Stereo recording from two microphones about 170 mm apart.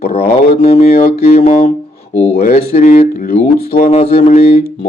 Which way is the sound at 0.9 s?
60° left (ahead or behind).